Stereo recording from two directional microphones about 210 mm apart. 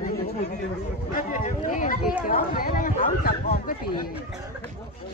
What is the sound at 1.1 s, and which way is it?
Speech, 40° left (ahead or behind).